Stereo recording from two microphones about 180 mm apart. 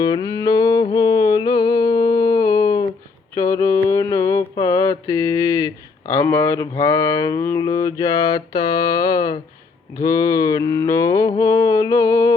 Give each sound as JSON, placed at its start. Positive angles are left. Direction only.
{"t": 0.0, "sound": "music", "side_deg": 20}
{"t": 3.3, "sound": "mantra", "side_deg": 15}